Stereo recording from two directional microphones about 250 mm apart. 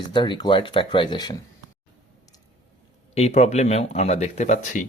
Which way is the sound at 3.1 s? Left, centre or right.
Left.